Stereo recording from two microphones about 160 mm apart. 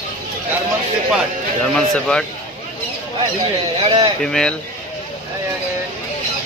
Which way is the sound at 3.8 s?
30° right (ahead or behind).